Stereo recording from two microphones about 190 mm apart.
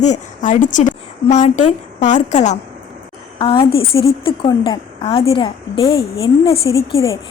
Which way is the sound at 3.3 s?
25° left (ahead or behind).